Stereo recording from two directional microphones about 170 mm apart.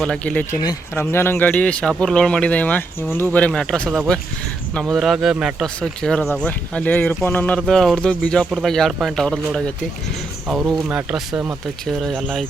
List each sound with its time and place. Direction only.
0.0 s speech: 5° left (ahead or behind)
0.6 s speech: 20° left (ahead or behind); by 9.7 s 5° left (ahead or behind)
10.8 s speech: 5° right (ahead or behind)